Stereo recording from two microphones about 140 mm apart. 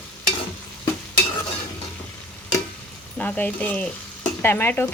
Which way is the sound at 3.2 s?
10° left (ahead or behind).